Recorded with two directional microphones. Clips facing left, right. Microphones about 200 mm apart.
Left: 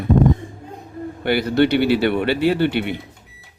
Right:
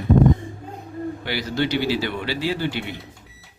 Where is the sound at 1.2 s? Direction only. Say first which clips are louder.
Left 10 dB; 55° left (ahead or behind).